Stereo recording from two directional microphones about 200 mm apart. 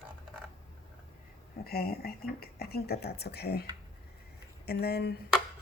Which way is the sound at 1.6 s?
50° left (ahead or behind).